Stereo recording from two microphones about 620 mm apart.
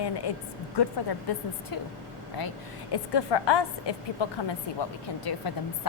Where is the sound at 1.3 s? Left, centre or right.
Left.